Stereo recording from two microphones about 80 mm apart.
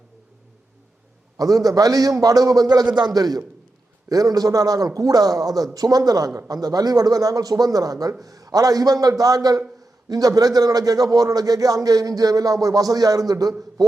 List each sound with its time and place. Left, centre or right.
1.4 s a man's voice: right